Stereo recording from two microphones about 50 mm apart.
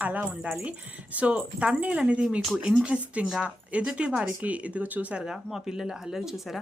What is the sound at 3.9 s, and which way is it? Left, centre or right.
A woman's voice, right.